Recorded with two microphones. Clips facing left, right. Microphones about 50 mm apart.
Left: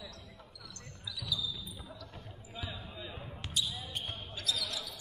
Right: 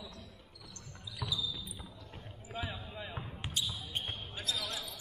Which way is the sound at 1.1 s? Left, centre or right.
Right.